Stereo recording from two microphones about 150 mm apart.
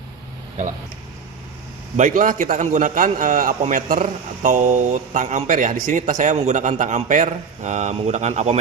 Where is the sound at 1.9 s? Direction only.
55° right (ahead or behind).